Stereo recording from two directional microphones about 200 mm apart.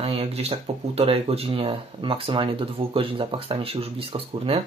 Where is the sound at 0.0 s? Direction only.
30° right (ahead or behind).